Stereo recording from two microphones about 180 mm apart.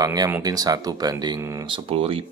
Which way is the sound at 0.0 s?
20° right (ahead or behind).